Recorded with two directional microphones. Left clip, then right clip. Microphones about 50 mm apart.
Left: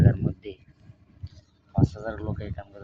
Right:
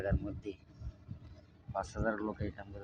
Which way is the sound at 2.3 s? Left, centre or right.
Left.